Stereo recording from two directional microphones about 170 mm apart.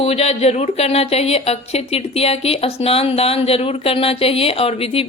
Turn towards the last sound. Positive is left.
turn(degrees=35)  # may be behind; listen again after turning